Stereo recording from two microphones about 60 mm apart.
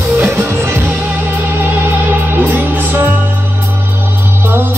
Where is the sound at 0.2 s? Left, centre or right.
Right.